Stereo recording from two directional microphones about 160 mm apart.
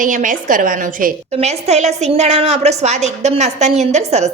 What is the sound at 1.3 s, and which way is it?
A woman's voice, 45° right (ahead or behind).